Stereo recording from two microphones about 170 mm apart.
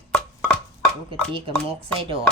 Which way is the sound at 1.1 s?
30° right (ahead or behind).